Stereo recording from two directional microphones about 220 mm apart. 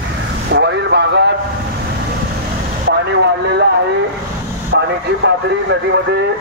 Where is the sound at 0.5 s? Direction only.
50° right (ahead or behind).